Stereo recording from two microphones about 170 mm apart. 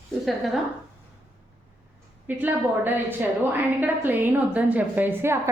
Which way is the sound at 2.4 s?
10° right (ahead or behind).